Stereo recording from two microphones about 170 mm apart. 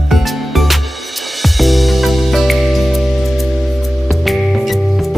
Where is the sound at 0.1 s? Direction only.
Centre (ahead or behind).